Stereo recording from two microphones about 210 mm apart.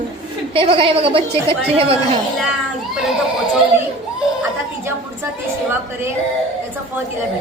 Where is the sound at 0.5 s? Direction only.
25° right (ahead or behind).